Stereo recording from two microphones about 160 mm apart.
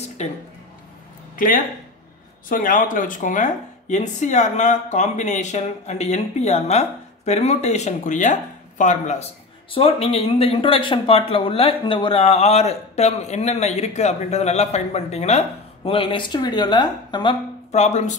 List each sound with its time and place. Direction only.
1.3 s a sound: 60° left (ahead or behind)
2.5 s speech: 60° left (ahead or behind); by 17.4 s 30° left (ahead or behind)
17.6 s speech: 45° left (ahead or behind)